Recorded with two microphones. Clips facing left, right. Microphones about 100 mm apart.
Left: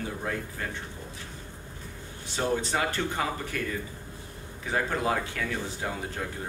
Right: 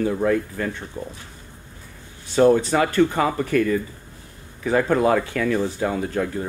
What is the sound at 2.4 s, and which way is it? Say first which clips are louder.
Speech: right 15 dB; 70° right (ahead or behind).